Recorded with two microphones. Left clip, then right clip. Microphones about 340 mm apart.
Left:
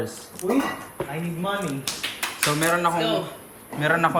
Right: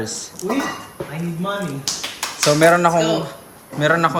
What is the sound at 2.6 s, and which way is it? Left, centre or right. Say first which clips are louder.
Speech: right 9 dB; centre.